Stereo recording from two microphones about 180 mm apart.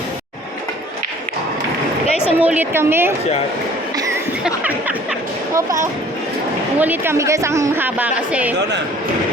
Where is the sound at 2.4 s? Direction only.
10° right (ahead or behind).